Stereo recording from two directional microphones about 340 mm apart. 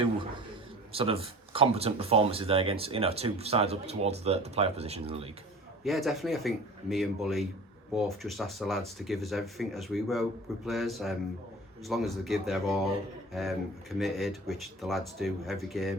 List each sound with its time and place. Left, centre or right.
0.9 s speech: centre
5.8 s speech: centre